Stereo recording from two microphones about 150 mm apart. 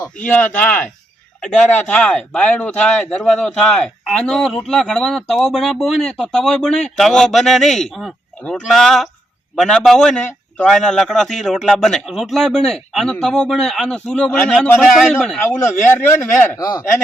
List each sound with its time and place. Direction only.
0.3 s speech: 10° left (ahead or behind)
15.4 s speech: 15° left (ahead or behind)
16.6 s speech: 25° left (ahead or behind)